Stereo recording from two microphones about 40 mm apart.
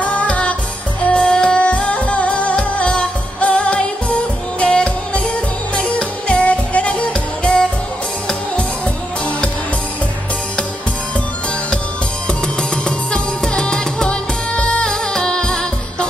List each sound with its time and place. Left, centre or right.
0.0 s music: left
1.3 s music: centre
1.6 s music: left
12.8 s music: centre
14.9 s music: centre